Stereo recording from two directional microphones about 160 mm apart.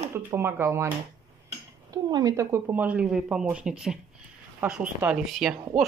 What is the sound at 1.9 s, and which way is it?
Speech, 25° right (ahead or behind).